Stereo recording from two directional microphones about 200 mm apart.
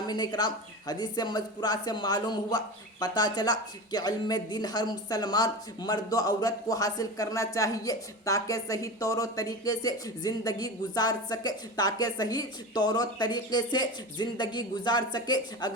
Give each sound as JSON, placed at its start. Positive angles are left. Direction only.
{"t": 0.1, "sound": "speech", "side_deg": 20}